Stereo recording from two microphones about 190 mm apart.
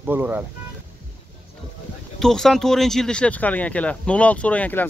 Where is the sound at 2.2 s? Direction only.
Centre (ahead or behind).